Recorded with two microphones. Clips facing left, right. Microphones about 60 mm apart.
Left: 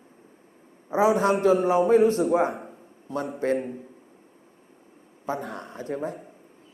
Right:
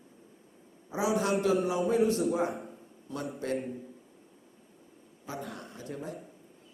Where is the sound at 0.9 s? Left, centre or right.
Left.